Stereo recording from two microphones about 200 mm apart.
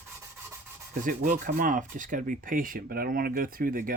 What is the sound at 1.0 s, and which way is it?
Speech, 40° right (ahead or behind).